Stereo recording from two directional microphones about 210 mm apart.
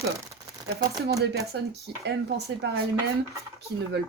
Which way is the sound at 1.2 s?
50° right (ahead or behind).